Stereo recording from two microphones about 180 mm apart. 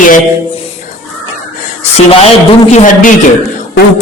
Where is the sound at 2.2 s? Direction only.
40° left (ahead or behind).